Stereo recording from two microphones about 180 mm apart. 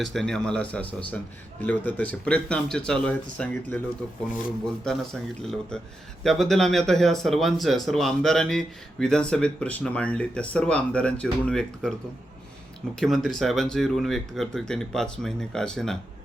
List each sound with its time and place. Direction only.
0.0 s speech: centre (ahead or behind)
4.9 s speech: 5° left (ahead or behind)
13.0 s speech: centre (ahead or behind)